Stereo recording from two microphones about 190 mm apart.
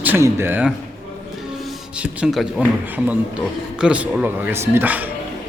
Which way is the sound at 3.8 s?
5° right (ahead or behind).